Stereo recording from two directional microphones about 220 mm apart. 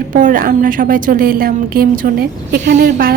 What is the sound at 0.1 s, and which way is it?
A woman's voice, 40° right (ahead or behind).